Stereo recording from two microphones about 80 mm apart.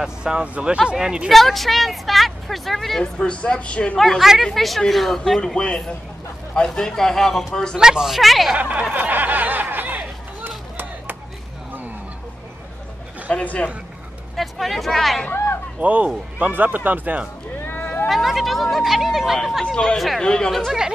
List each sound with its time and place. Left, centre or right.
0.0 s speech: centre
1.3 s a woman's voice: centre
7.7 s a woman's voice: centre
8.5 s speech: centre
8.9 s chatter: right
13.3 s a man's voice: centre
14.3 s speech: centre
15.8 s speech: centre
17.6 s a sound: left
18.0 s a woman's voice: centre
19.6 s a man's voice: centre